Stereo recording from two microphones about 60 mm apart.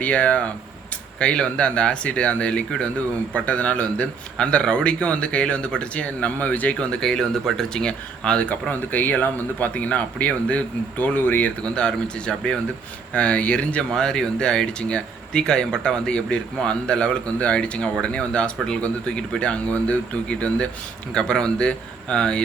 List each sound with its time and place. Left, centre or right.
0.0 s a man's voice: left
6.7 s a man's voice: centre
11.7 s a man's voice: centre
13.9 s speech: centre